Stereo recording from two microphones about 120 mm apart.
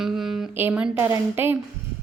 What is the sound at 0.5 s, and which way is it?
A woman's voice, 15° right (ahead or behind).